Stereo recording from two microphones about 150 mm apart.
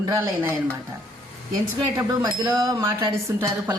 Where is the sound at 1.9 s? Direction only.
25° right (ahead or behind).